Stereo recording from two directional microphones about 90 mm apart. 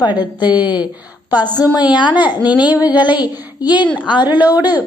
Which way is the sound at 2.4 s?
15° right (ahead or behind).